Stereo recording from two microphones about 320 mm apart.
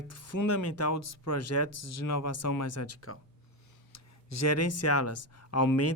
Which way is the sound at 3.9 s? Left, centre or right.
Left.